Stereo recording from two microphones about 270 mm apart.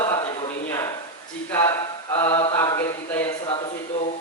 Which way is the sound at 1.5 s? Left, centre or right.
Centre.